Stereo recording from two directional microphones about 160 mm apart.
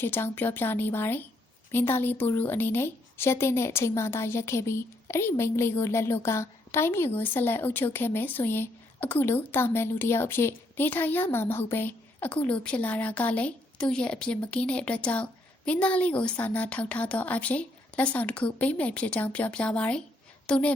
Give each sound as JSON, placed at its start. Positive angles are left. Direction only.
{"t": 0.0, "sound": "speech", "side_deg": 10}